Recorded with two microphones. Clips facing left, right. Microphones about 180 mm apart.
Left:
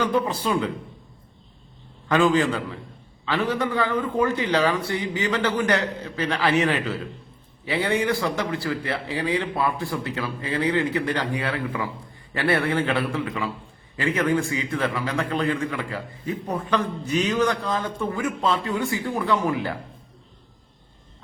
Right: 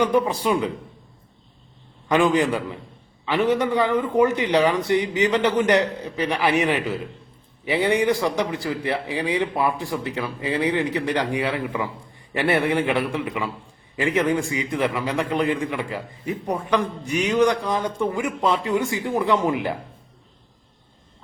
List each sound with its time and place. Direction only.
0.0 s a man's voice: 15° right (ahead or behind)
2.0 s a man's voice: 20° right (ahead or behind)